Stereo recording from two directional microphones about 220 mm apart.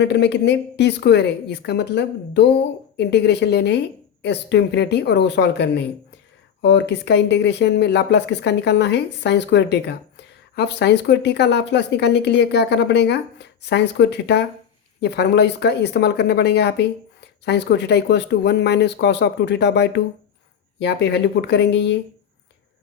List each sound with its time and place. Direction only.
0.0 s speech: 50° left (ahead or behind)